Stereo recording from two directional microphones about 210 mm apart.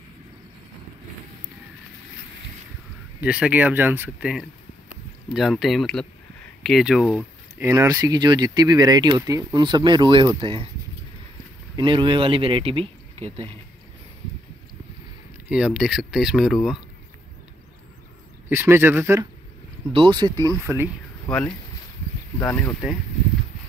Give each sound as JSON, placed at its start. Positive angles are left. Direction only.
{"t": 3.2, "sound": "speech", "side_deg": -5}
{"t": 7.6, "sound": "speech", "side_deg": -15}
{"t": 11.7, "sound": "speech", "side_deg": -25}
{"t": 15.5, "sound": "speech", "side_deg": -5}
{"t": 18.5, "sound": "speech", "side_deg": -10}
{"t": 19.9, "sound": "speech", "side_deg": -25}
{"t": 20.5, "sound": "speech", "side_deg": -5}
{"t": 22.4, "sound": "speech", "side_deg": 10}